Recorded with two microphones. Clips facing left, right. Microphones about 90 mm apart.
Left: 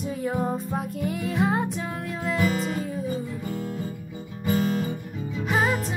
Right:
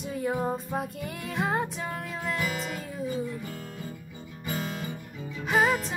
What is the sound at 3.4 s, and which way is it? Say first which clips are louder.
Guitar: left 7 dB; 35° left (ahead or behind).